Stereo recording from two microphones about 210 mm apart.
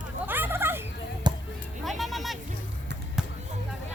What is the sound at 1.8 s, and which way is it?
Music, centre (ahead or behind).